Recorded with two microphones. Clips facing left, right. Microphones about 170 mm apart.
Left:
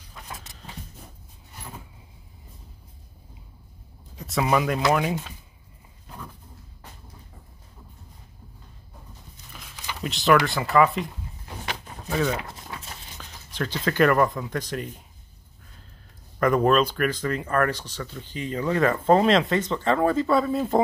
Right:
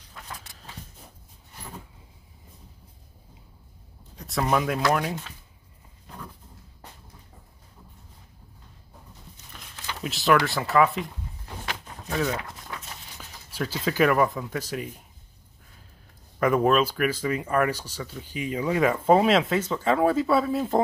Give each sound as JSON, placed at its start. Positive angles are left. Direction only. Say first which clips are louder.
{"t": 4.2, "sound": "speech", "louder": "left 2 dB", "side_deg": 0}
{"t": 10.0, "sound": "speech", "louder": "left 2 dB", "side_deg": 0}
{"t": 12.1, "sound": "speech", "louder": "left 2 dB", "side_deg": 0}
{"t": 12.4, "sound": "a sound", "louder": "left 1 dB", "side_deg": 25}
{"t": 13.2, "sound": "speech", "louder": "left 1 dB", "side_deg": -5}
{"t": 16.3, "sound": "speech", "louder": "left 1 dB", "side_deg": -5}